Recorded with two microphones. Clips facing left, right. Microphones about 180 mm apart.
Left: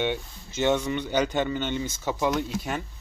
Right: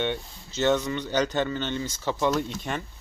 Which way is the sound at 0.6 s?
10° left (ahead or behind).